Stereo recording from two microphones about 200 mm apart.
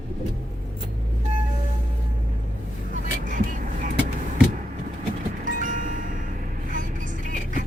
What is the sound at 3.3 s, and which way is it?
Vehicle, 40° right (ahead or behind).